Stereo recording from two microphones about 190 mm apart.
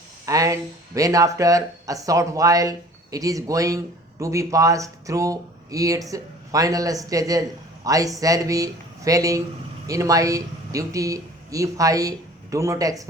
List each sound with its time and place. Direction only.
0.3 s speech: 15° right (ahead or behind)